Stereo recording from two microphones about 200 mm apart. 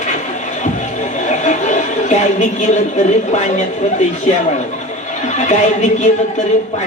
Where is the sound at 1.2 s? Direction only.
35° left (ahead or behind).